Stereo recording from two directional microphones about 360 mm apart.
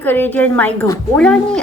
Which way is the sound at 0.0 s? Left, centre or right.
Centre.